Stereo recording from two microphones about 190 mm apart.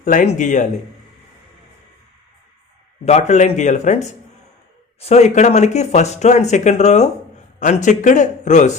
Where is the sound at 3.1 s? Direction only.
35° left (ahead or behind).